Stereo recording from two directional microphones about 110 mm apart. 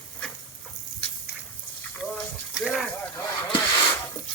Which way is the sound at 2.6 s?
Centre (ahead or behind).